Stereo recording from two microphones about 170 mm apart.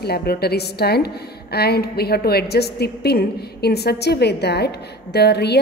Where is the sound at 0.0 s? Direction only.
70° left (ahead or behind).